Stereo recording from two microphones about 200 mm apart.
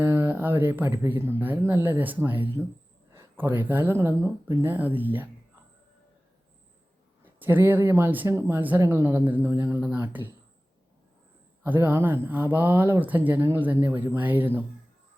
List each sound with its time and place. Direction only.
0.0 s speech: 10° right (ahead or behind)
7.3 s speech: 10° right (ahead or behind)
11.6 s speech: 10° right (ahead or behind)